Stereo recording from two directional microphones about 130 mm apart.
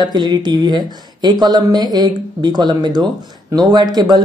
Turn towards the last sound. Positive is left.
turn(degrees=-30)  # may be behind; listen again after turning